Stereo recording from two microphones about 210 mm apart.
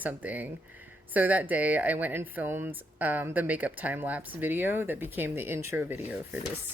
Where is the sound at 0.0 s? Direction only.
10° right (ahead or behind).